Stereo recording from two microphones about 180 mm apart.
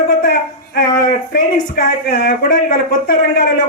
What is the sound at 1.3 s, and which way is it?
Speech, 55° left (ahead or behind).